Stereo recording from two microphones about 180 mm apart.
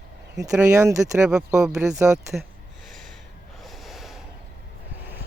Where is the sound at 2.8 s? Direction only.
Centre (ahead or behind).